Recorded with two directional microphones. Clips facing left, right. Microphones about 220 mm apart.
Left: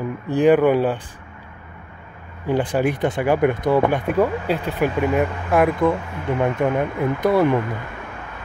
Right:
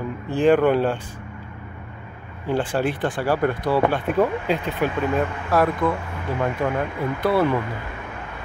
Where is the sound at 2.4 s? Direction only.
15° left (ahead or behind).